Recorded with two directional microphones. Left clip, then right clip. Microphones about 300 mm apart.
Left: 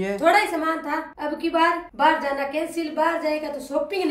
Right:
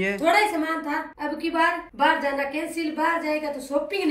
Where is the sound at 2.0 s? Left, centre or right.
Left.